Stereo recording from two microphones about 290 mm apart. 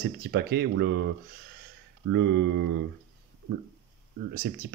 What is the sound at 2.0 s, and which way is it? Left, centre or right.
Speech, right.